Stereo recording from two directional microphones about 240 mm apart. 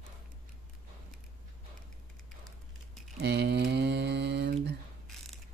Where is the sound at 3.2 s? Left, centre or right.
Right.